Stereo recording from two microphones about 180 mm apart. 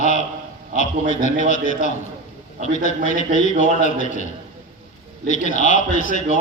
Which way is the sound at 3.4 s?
45° left (ahead or behind).